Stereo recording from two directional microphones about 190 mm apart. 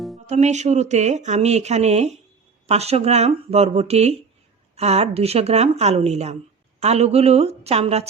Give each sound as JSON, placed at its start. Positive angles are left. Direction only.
{"t": 0.3, "sound": "speech", "side_deg": -35}